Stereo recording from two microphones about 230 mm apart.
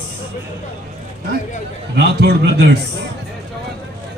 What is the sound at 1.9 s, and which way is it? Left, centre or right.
Speech, right.